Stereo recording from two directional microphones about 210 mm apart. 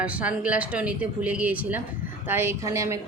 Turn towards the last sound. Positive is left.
turn(degrees=-15)  # may be behind; listen again after turning